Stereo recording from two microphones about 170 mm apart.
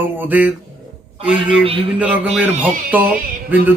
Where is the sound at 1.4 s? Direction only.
30° right (ahead or behind).